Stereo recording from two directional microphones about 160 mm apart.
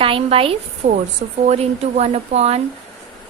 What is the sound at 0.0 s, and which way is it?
A woman's voice, 35° right (ahead or behind).